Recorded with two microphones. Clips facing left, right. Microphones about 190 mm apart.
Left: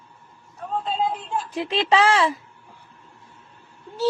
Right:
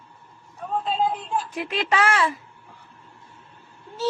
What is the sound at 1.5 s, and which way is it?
Speech, 30° left (ahead or behind).